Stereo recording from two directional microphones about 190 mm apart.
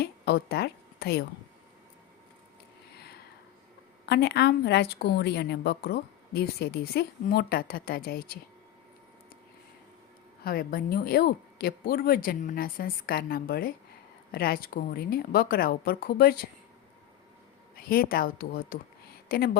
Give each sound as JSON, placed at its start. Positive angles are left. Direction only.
{"t": 0.0, "sound": "a sound", "side_deg": 55}
{"t": 4.0, "sound": "speech", "side_deg": 60}
{"t": 10.4, "sound": "speech", "side_deg": 50}
{"t": 17.8, "sound": "speech", "side_deg": 50}